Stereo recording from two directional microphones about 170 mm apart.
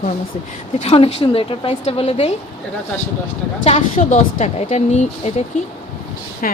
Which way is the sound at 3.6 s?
35° left (ahead or behind).